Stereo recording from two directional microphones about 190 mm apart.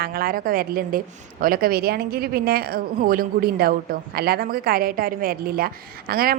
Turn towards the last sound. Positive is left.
turn(degrees=-50)  # may be behind; listen again after turning